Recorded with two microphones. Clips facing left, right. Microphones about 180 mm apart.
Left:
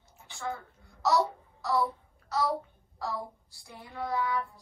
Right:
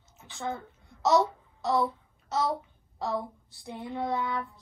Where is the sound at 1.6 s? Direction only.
20° right (ahead or behind).